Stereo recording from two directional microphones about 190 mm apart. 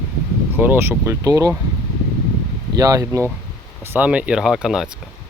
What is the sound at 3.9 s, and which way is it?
Speech, 5° right (ahead or behind).